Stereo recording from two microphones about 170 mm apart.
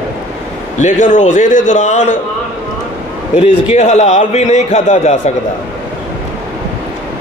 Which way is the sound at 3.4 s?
45° left (ahead or behind).